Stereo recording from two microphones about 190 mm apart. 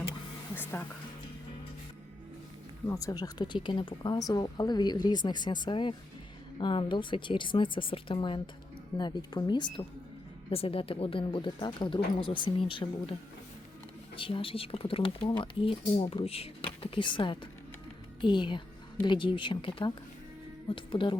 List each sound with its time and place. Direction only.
0.5 s a sound: 10° left (ahead or behind)
2.8 s speech: 15° left (ahead or behind)
14.2 s speech: 25° left (ahead or behind)